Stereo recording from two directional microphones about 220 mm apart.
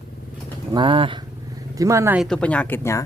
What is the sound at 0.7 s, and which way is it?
Speech, 20° right (ahead or behind).